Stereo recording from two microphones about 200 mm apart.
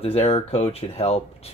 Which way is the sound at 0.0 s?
30° left (ahead or behind).